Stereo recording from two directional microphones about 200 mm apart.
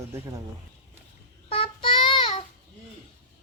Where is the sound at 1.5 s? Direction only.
25° left (ahead or behind).